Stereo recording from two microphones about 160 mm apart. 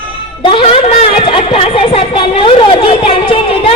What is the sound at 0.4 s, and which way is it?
A woman's voice, 35° left (ahead or behind).